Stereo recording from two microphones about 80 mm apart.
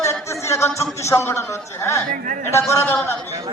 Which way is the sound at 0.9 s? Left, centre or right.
Left.